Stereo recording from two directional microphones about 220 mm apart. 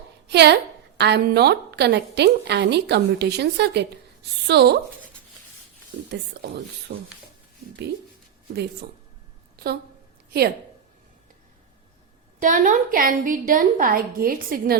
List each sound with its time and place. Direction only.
0.3 s a woman's voice: 50° right (ahead or behind)
6.1 s a woman's voice: 50° right (ahead or behind)
9.6 s speech: 45° right (ahead or behind)
12.4 s a woman's voice: 35° right (ahead or behind)